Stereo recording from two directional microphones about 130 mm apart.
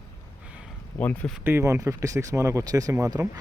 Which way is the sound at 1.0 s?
10° left (ahead or behind).